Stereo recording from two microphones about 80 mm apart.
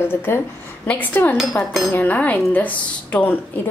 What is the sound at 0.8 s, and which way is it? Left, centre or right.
A woman's voice, centre.